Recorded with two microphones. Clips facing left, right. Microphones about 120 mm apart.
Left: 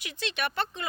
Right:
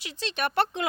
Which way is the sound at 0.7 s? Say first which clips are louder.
Right 6 dB; 90° right.